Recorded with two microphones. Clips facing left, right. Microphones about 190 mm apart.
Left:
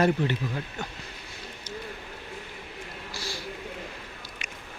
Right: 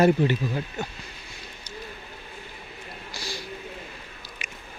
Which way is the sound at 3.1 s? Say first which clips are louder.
Right 1 dB; 15° right (ahead or behind).